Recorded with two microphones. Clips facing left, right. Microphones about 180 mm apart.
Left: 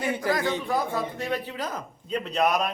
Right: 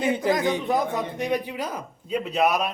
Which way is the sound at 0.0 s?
20° right (ahead or behind).